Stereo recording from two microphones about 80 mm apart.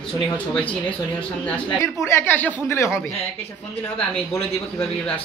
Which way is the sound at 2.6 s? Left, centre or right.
Left.